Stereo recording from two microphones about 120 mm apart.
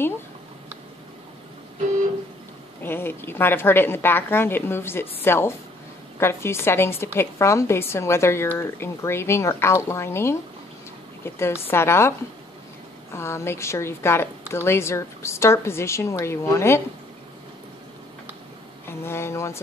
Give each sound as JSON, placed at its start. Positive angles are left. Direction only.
{"t": 2.8, "sound": "a woman's voice", "side_deg": 20}
{"t": 13.1, "sound": "a woman's voice", "side_deg": 20}
{"t": 18.9, "sound": "a woman's voice", "side_deg": 20}